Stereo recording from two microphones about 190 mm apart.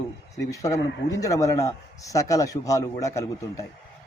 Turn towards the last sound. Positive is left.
turn(degrees=15)  # may be behind; listen again after turning